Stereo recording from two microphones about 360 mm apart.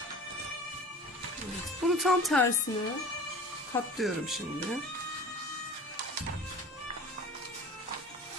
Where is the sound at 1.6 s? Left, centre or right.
Centre.